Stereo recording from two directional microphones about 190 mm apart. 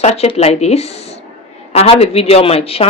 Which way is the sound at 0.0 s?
35° left (ahead or behind).